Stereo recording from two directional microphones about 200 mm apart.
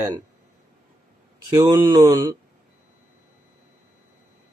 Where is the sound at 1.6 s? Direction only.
15° right (ahead or behind).